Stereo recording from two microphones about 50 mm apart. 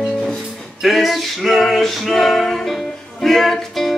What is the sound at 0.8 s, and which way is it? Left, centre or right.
Music, centre.